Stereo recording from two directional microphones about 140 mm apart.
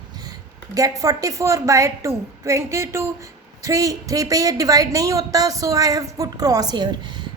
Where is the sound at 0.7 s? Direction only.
25° right (ahead or behind).